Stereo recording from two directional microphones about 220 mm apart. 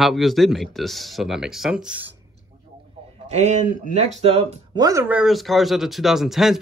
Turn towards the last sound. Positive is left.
turn(degrees=0)  # may be behind; listen again after turning